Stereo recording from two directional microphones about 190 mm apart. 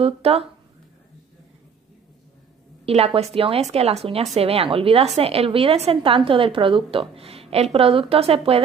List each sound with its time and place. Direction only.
0.0 s speech: 30° right (ahead or behind)
2.8 s a woman's voice: 30° right (ahead or behind)